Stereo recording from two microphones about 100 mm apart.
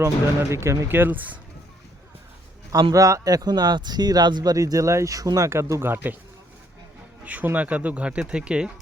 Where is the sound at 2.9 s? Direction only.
35° right (ahead or behind).